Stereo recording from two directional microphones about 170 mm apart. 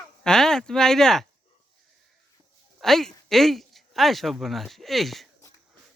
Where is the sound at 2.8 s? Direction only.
Centre (ahead or behind).